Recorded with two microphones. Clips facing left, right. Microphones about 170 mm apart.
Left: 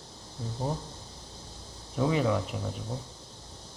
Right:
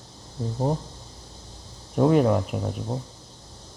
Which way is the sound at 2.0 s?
55° right (ahead or behind).